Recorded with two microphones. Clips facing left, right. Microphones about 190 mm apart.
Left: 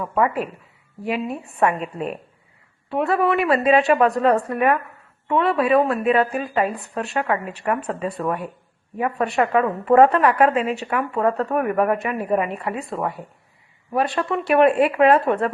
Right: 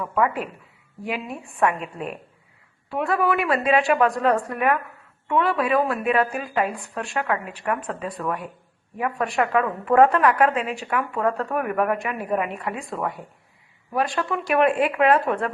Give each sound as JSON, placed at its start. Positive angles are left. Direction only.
{"t": 0.0, "sound": "a woman's voice", "side_deg": 30}
{"t": 1.0, "sound": "a woman's voice", "side_deg": 0}
{"t": 2.9, "sound": "a woman's voice", "side_deg": 0}